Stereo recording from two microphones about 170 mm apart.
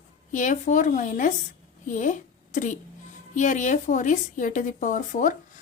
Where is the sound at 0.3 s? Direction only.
45° left (ahead or behind).